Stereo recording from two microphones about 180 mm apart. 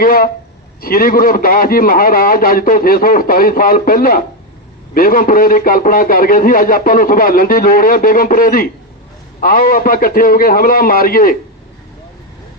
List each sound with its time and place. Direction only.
0.0 s a man's voice: 55° left (ahead or behind)